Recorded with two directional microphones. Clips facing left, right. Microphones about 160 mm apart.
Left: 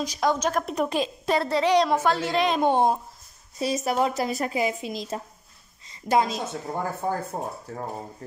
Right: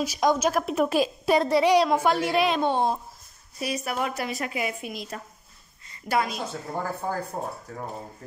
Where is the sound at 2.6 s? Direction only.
15° left (ahead or behind).